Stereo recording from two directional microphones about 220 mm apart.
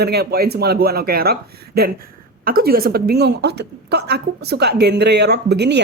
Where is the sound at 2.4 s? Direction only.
45° right (ahead or behind).